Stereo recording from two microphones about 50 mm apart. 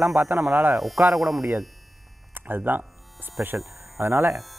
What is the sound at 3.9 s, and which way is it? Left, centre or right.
Speech, right.